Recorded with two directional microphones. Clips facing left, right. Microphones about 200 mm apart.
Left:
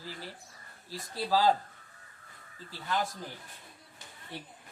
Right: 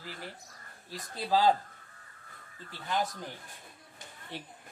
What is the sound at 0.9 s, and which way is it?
Speech, 20° right (ahead or behind).